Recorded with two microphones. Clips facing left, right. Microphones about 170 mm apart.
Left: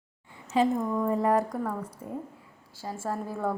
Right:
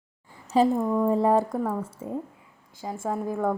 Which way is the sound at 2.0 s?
90° right.